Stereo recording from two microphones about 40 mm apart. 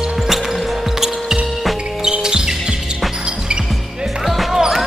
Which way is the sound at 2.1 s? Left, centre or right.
Centre.